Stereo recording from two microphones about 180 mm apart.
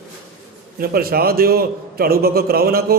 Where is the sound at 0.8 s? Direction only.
55° right (ahead or behind).